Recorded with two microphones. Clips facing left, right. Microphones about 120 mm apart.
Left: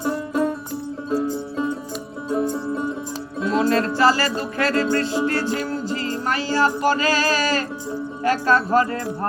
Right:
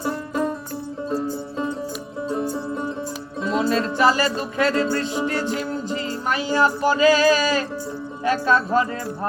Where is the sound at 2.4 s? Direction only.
10° right (ahead or behind).